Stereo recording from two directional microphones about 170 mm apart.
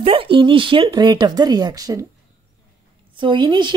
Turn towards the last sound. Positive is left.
turn(degrees=-25)  # may be behind; listen again after turning